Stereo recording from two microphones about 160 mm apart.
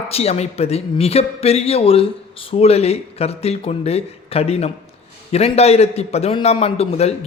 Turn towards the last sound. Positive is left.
turn(degrees=40)  # may be behind; listen again after turning